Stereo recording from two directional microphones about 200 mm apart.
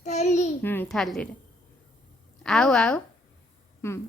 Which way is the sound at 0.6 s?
10° left (ahead or behind).